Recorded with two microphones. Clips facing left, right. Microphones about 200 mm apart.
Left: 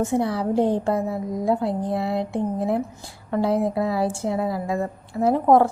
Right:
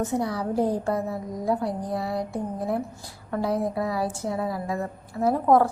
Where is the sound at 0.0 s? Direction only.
30° left (ahead or behind).